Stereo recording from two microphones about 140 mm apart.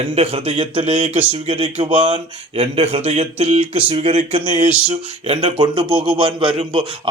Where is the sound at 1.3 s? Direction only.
45° right (ahead or behind).